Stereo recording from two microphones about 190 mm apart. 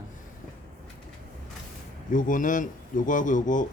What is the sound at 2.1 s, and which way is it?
Speech, 45° left (ahead or behind).